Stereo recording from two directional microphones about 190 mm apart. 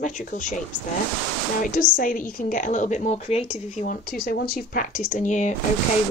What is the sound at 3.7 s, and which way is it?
Speech, 45° left (ahead or behind).